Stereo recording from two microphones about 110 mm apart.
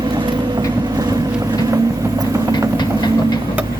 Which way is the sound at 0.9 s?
35° right (ahead or behind).